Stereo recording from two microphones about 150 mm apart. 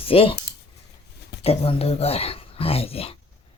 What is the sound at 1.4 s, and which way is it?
Speech, 40° left (ahead or behind).